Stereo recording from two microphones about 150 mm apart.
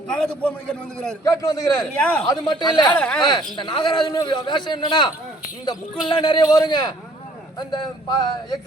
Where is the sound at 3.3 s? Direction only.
30° left (ahead or behind).